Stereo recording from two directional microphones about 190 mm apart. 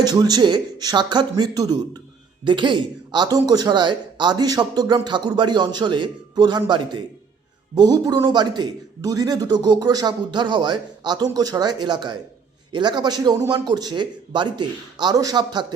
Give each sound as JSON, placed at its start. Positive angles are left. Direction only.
{"t": 0.0, "sound": "speech", "side_deg": -20}